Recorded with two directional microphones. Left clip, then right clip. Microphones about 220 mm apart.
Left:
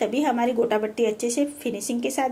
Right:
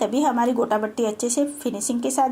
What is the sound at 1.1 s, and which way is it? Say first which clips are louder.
Speech: right 1 dB; 20° right (ahead or behind).